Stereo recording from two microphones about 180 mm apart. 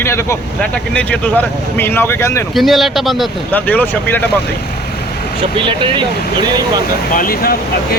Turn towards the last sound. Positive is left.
turn(degrees=55)  # may be behind; listen again after turning